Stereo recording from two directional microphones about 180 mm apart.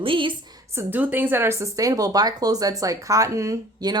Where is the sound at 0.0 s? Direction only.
30° right (ahead or behind).